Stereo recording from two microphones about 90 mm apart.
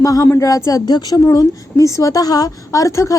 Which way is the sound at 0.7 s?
45° left (ahead or behind).